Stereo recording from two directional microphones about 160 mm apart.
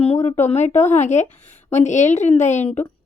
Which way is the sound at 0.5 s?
45° left (ahead or behind).